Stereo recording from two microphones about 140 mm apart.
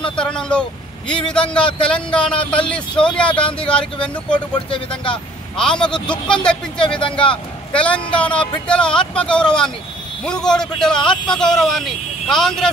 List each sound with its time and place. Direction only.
0.1 s speech: 5° left (ahead or behind)
2.9 s speech: 35° left (ahead or behind)
3.2 s speech: 10° left (ahead or behind)
11.0 s speech: 35° left (ahead or behind)
11.3 s speech: 5° left (ahead or behind)